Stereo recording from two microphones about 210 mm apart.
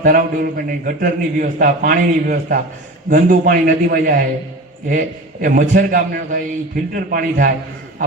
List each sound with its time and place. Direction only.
0.0 s a man's voice: 40° right (ahead or behind)